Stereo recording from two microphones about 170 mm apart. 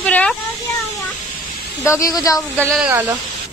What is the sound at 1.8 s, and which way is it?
Speech, 20° left (ahead or behind).